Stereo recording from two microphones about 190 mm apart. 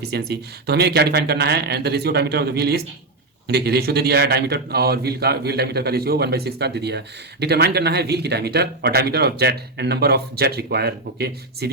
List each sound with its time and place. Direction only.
0.1 s a man's voice: 60° right (ahead or behind)